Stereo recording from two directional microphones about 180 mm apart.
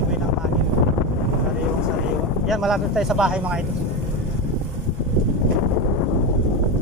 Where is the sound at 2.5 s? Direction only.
Centre (ahead or behind).